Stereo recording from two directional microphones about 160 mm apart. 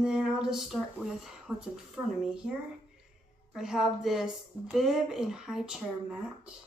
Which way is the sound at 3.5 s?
5° right (ahead or behind).